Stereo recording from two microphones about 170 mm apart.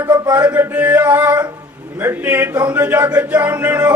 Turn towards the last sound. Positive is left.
turn(degrees=-10)  # may be behind; listen again after turning